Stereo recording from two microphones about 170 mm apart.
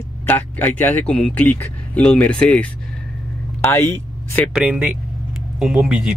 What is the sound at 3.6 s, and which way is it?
Speech, 15° left (ahead or behind).